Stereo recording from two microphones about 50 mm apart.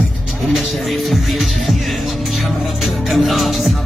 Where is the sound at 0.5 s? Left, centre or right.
Centre.